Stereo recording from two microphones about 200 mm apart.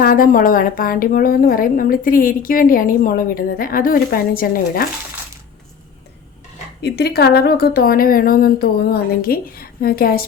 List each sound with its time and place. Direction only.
0.0 s a woman's voice: 45° left (ahead or behind)
6.8 s a woman's voice: 55° left (ahead or behind)